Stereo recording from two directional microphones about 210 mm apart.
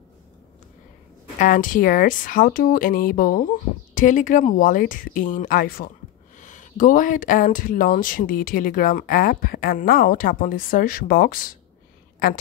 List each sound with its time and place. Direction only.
1.4 s speech: 40° left (ahead or behind)